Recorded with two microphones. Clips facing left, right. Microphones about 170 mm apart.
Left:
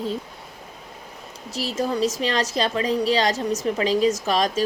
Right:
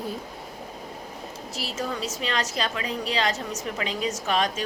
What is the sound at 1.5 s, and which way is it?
Speech, 35° left (ahead or behind).